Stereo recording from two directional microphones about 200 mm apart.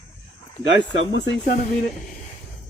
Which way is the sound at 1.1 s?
65° left (ahead or behind).